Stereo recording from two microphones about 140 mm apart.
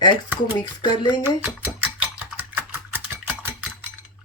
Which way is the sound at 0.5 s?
30° left (ahead or behind).